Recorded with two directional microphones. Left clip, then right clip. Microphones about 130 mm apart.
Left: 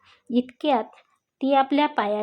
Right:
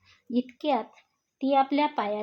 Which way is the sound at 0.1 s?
25° left (ahead or behind).